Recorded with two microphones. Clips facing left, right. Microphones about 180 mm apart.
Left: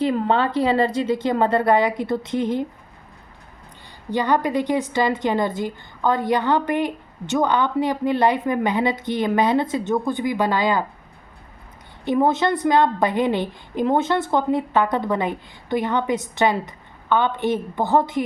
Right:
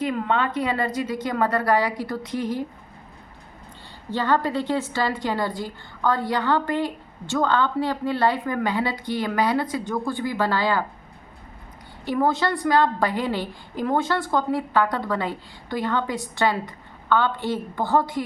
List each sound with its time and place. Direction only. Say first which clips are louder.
0.0 s a woman's voice: left 4 dB; 30° left (ahead or behind)
4.1 s a woman's voice: left 2 dB; 15° left (ahead or behind)
12.0 s a woman's voice: left 3 dB; 20° left (ahead or behind)